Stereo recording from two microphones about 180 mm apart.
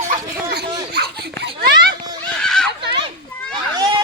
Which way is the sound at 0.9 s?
65° right (ahead or behind).